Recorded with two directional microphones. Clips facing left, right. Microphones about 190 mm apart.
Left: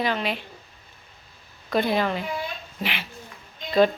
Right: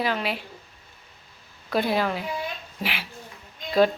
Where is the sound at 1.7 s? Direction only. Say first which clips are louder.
Left 1 dB; 5° right (ahead or behind).